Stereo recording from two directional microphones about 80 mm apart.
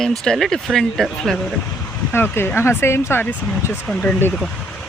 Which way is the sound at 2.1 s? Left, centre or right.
Left.